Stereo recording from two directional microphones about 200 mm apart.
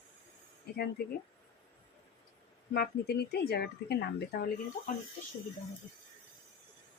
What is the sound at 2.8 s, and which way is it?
Speech, 55° left (ahead or behind).